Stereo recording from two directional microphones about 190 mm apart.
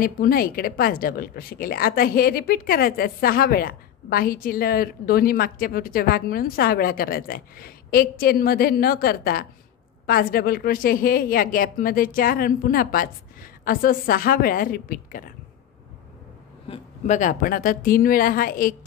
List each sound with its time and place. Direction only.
0.0 s a woman's voice: 50° left (ahead or behind)
16.6 s a woman's voice: 35° left (ahead or behind)